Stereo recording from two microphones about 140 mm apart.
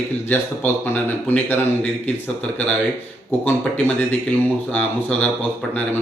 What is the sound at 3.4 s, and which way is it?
Speech, 15° left (ahead or behind).